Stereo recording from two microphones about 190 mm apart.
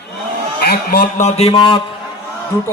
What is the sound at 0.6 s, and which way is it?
A man's voice, 50° left (ahead or behind).